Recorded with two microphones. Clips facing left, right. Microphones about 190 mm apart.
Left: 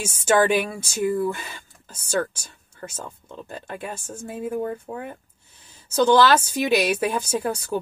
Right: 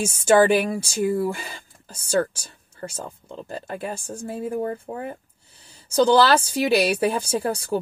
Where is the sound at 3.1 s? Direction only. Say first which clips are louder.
Right 2 dB; 30° right (ahead or behind).